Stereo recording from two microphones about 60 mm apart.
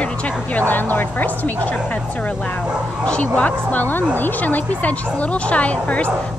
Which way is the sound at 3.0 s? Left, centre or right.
Left.